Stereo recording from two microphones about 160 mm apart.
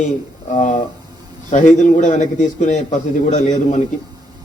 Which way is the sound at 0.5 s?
50° left (ahead or behind).